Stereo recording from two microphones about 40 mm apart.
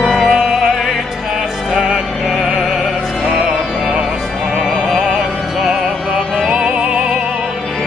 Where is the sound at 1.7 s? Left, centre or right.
Centre.